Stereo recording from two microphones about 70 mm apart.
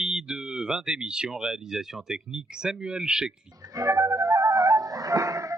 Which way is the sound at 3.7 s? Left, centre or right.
Right.